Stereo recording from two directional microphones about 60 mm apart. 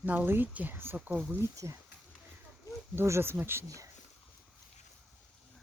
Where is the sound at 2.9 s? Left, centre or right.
Right.